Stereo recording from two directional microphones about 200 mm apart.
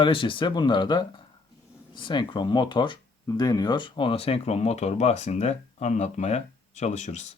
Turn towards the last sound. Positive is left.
turn(degrees=35)  # may be behind; listen again after turning